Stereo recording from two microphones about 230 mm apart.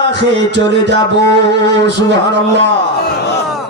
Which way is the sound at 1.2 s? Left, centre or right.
Right.